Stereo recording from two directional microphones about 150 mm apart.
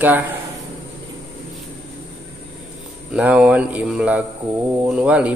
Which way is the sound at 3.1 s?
10° right (ahead or behind).